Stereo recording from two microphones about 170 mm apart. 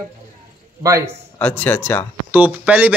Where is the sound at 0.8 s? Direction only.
15° right (ahead or behind).